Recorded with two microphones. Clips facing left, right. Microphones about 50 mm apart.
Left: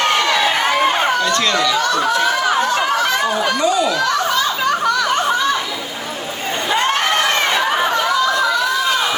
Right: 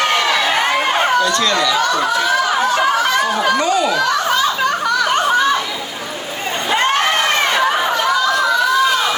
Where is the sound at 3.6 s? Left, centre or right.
Right.